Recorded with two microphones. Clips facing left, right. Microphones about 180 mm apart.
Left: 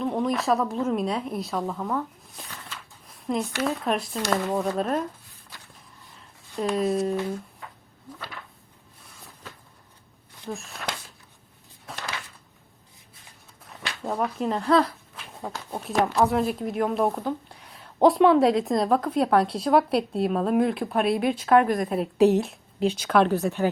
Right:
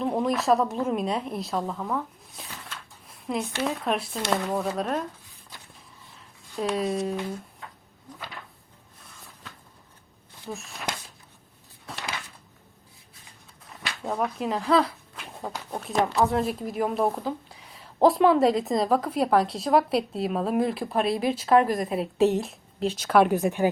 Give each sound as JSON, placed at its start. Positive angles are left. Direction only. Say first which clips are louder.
{"t": 0.0, "sound": "a woman's voice", "louder": "even", "side_deg": 0}
{"t": 6.6, "sound": "a woman's voice", "louder": "left 2 dB", "side_deg": 0}
{"t": 10.5, "sound": "a woman's voice", "louder": "left 2 dB", "side_deg": 0}
{"t": 14.0, "sound": "a woman's voice", "louder": "left 1 dB", "side_deg": 0}